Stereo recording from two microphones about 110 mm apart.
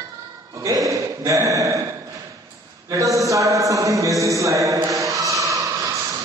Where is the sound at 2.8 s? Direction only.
30° right (ahead or behind).